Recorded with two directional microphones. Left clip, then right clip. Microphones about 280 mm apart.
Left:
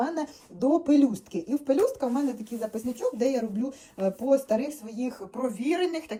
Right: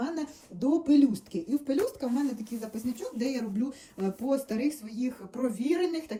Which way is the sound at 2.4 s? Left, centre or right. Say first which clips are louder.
Left 4 dB; centre.